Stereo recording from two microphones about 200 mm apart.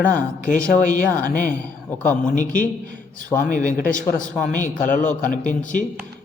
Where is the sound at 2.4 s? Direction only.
40° left (ahead or behind).